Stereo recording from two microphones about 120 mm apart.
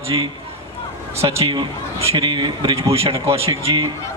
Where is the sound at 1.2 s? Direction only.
40° right (ahead or behind).